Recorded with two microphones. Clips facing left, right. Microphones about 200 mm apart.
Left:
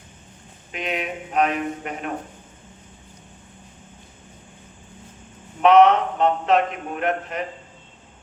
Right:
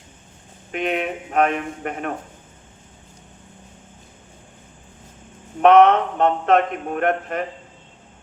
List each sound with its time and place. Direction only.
0.7 s a man's voice: 50° right (ahead or behind)
5.6 s a man's voice: 55° right (ahead or behind)